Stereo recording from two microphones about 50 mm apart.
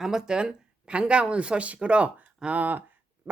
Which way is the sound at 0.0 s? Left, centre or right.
Centre.